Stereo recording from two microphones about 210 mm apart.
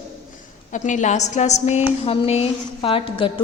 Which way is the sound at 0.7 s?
35° left (ahead or behind).